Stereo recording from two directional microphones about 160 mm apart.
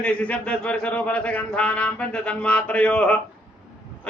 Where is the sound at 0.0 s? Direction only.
10° left (ahead or behind).